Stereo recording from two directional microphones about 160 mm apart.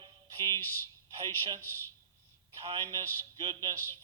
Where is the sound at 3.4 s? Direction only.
25° right (ahead or behind).